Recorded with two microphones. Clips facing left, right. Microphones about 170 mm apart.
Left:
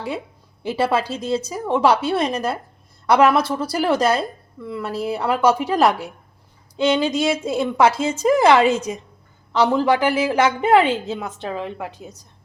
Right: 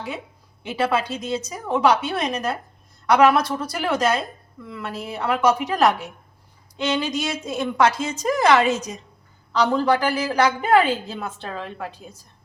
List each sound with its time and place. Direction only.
0.6 s a woman's voice: 30° left (ahead or behind)